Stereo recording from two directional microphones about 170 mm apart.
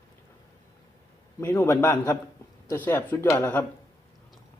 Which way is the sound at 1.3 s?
15° left (ahead or behind).